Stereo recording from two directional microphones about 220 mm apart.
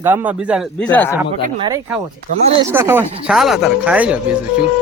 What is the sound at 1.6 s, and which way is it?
Speech, 20° right (ahead or behind).